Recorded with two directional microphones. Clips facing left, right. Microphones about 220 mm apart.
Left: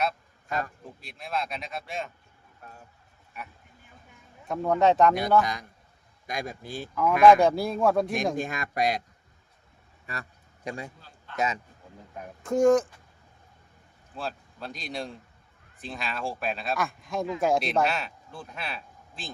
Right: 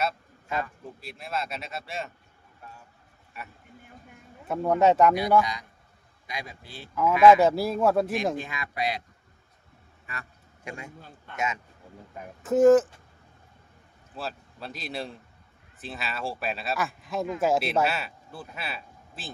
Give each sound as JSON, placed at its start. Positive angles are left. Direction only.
{"t": 1.0, "sound": "speech", "side_deg": -5}
{"t": 4.4, "sound": "speech", "side_deg": -10}
{"t": 5.4, "sound": "speech", "side_deg": 50}
{"t": 6.9, "sound": "speech", "side_deg": -5}
{"t": 8.4, "sound": "speech", "side_deg": 45}
{"t": 10.1, "sound": "a man's voice", "side_deg": 35}
{"t": 12.1, "sound": "speech", "side_deg": -5}
{"t": 14.2, "sound": "speech", "side_deg": -5}